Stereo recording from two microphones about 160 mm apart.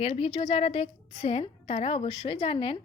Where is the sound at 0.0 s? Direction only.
35° left (ahead or behind).